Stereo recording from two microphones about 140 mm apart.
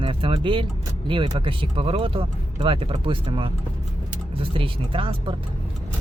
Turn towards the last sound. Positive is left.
turn(degrees=-40)  # may be behind; listen again after turning